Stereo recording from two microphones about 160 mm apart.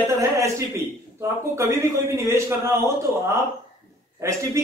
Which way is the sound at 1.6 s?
15° right (ahead or behind).